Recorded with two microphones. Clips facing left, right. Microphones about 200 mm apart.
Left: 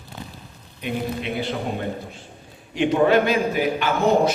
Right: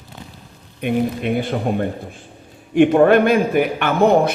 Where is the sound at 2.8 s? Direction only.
55° right (ahead or behind).